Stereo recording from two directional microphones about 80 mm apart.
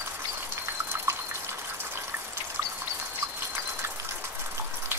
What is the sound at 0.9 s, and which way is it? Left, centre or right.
Water, right.